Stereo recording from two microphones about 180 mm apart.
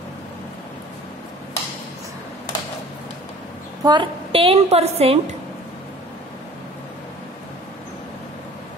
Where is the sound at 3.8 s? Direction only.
25° right (ahead or behind).